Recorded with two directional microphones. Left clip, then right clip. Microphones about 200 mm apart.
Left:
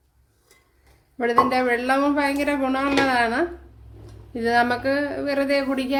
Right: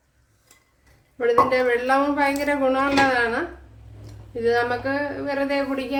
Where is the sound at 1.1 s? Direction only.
45° left (ahead or behind).